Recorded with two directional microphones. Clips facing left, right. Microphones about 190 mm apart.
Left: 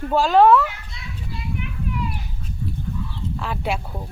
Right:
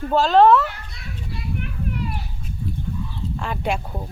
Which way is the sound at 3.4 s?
Centre (ahead or behind).